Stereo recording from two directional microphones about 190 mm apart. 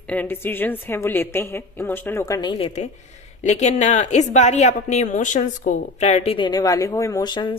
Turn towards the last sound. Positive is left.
turn(degrees=25)  # may be behind; listen again after turning